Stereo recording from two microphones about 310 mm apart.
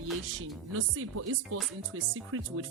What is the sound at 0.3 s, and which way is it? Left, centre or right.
A woman's voice, right.